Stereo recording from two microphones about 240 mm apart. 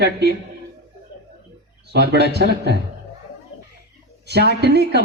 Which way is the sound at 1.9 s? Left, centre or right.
Right.